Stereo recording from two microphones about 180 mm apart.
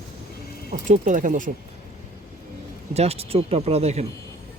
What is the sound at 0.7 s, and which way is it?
Speech, 45° right (ahead or behind).